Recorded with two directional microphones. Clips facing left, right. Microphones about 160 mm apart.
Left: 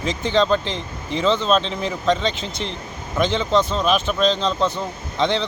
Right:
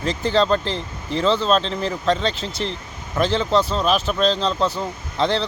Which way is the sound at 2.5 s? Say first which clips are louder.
Right 2 dB; 35° right (ahead or behind).